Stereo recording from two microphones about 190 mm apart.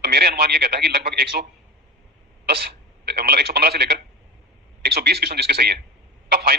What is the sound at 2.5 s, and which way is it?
A man's voice, 55° right (ahead or behind).